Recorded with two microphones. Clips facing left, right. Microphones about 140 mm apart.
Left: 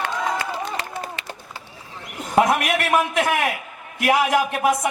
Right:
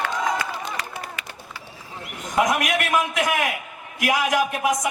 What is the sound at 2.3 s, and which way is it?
Speech, 30° left (ahead or behind).